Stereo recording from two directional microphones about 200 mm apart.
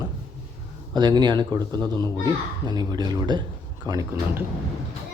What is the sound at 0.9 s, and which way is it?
A child's voice, 20° right (ahead or behind).